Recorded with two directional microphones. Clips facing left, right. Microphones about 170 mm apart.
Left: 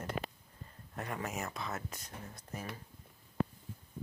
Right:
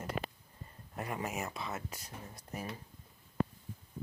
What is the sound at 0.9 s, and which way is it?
Speech, 10° right (ahead or behind).